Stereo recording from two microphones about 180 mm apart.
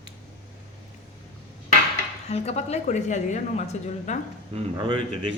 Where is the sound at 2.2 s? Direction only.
35° left (ahead or behind).